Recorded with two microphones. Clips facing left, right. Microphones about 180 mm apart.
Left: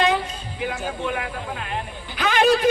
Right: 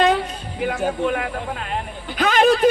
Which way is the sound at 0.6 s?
50° right (ahead or behind).